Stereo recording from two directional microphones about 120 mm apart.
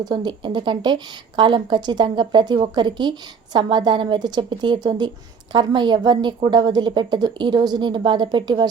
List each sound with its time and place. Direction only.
0.0 s a woman's voice: 40° right (ahead or behind)